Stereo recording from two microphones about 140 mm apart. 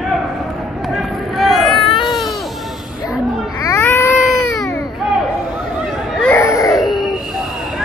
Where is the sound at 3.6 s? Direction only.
20° left (ahead or behind).